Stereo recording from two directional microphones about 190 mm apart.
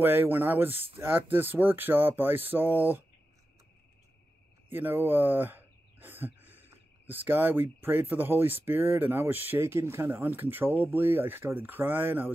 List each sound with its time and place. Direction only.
0.0 s speech: 10° right (ahead or behind)
4.6 s speech: 10° right (ahead or behind)